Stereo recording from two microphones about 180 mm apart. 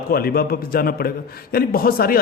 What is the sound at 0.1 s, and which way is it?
Speech, 60° left (ahead or behind).